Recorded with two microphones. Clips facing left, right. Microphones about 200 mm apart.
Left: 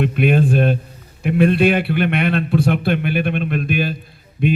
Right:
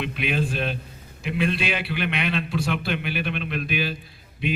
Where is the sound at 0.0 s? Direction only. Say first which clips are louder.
Left 10 dB; 50° left (ahead or behind).